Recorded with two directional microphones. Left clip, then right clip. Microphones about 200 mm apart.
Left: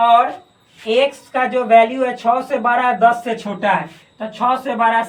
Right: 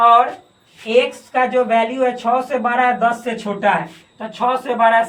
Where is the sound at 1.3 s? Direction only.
15° right (ahead or behind).